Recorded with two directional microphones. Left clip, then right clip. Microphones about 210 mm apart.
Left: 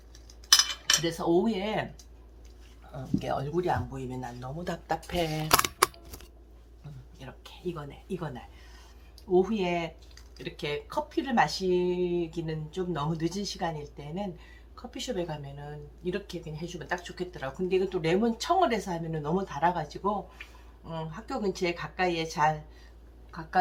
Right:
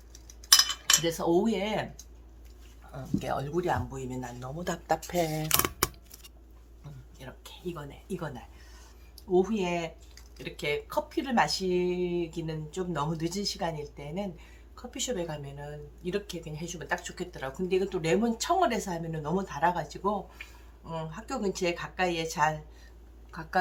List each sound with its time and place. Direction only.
1.0 s speech: 20° right (ahead or behind)
2.9 s speech: 15° right (ahead or behind)
5.2 s speech: 10° right (ahead or behind)
7.2 s speech: 10° right (ahead or behind)